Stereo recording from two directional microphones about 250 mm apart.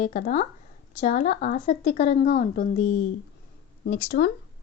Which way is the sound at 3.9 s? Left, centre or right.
Left.